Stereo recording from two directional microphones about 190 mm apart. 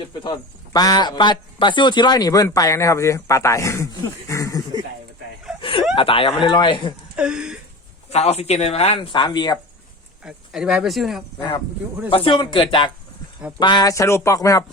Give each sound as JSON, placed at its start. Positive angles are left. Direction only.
{"t": 0.1, "sound": "a man's voice", "side_deg": 20}
{"t": 5.5, "sound": "a sound", "side_deg": 25}
{"t": 6.0, "sound": "a man's voice", "side_deg": 30}
{"t": 7.2, "sound": "a sound", "side_deg": -5}
{"t": 8.1, "sound": "speech", "side_deg": 35}
{"t": 10.2, "sound": "speech", "side_deg": -5}
{"t": 12.1, "sound": "a man's voice", "side_deg": 25}